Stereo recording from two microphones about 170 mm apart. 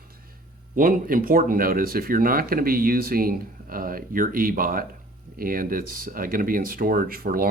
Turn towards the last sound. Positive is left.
turn(degrees=-55)  # may be behind; listen again after turning